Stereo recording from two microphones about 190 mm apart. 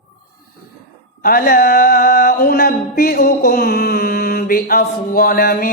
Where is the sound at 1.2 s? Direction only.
50° left (ahead or behind).